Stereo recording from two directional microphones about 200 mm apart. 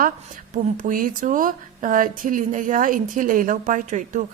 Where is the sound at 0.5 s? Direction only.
40° right (ahead or behind).